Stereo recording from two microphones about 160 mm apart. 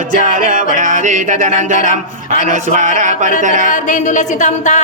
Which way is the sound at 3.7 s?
50° left (ahead or behind).